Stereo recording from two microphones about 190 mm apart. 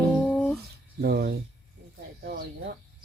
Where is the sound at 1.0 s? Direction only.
55° right (ahead or behind).